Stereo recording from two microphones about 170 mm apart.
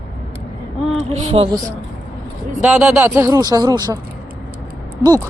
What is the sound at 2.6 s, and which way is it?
Speech, 10° right (ahead or behind).